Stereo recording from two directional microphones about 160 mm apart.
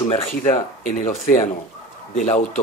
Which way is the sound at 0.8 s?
55° left (ahead or behind).